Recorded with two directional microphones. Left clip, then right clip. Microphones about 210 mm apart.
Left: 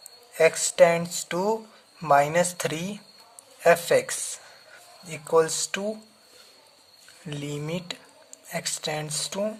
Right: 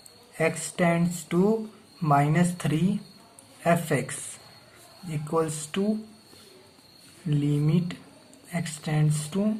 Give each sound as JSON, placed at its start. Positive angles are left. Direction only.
{"t": 0.3, "sound": "speech", "side_deg": 55}
{"t": 7.3, "sound": "speech", "side_deg": 55}